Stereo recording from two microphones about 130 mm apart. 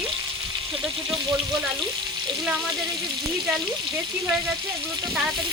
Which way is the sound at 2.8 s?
30° right (ahead or behind).